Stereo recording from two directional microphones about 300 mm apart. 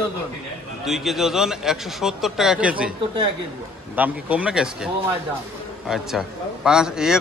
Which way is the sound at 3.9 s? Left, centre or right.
Centre.